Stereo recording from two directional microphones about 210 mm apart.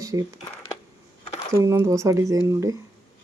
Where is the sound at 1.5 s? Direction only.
15° right (ahead or behind).